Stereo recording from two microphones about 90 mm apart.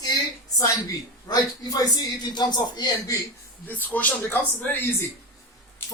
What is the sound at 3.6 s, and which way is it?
Speech, 20° left (ahead or behind).